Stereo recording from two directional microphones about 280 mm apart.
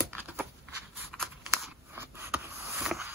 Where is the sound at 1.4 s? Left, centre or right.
Centre.